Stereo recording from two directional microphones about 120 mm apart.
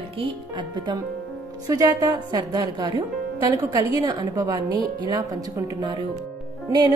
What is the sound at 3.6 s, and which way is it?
Speech, 25° right (ahead or behind).